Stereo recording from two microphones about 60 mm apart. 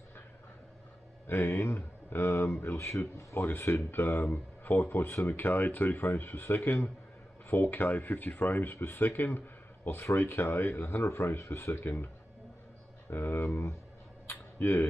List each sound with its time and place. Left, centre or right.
1.2 s speech: left
13.1 s speech: left
14.2 s a sound: left